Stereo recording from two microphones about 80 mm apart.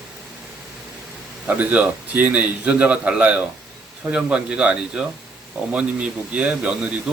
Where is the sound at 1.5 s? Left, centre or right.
Centre.